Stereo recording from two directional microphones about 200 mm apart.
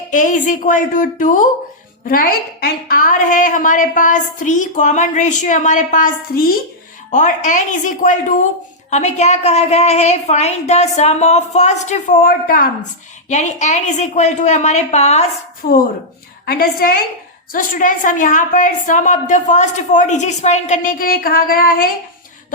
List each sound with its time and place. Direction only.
0.1 s a woman's voice: 40° left (ahead or behind)
16.5 s a woman's voice: 50° left (ahead or behind)